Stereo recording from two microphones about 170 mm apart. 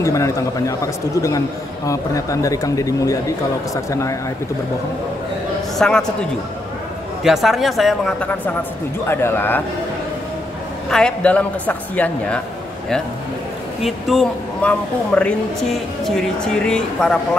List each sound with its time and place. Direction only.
0.0 s a man's voice: 20° left (ahead or behind)
5.8 s a man's voice: 5° left (ahead or behind)
7.2 s speech: centre (ahead or behind)
10.9 s speech: 5° left (ahead or behind)
13.8 s speech: centre (ahead or behind)